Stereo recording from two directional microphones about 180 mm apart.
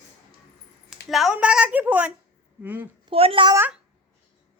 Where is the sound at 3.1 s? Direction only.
30° right (ahead or behind).